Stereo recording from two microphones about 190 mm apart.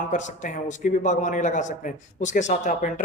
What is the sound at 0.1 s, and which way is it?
A man's voice, 40° left (ahead or behind).